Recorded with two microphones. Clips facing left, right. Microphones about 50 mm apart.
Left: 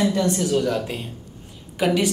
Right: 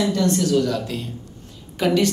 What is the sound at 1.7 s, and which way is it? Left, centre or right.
Speech, centre.